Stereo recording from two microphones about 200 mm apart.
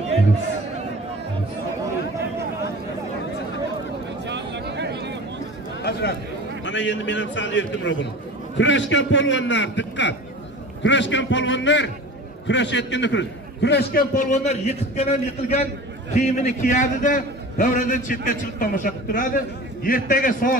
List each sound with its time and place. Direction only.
4.3 s a sound: 60° right (ahead or behind)
5.8 s chatter: 55° left (ahead or behind)
6.6 s a man's voice: 65° left (ahead or behind)
14.1 s a man's voice: 40° left (ahead or behind)